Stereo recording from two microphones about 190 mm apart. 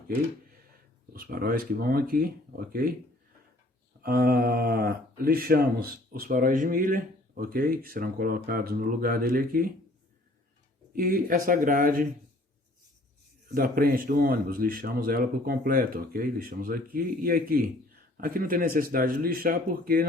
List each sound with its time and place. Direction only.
1.1 s speech: 50° right (ahead or behind)
4.0 s speech: 50° right (ahead or behind)
10.9 s speech: 50° right (ahead or behind)
13.5 s speech: 50° right (ahead or behind)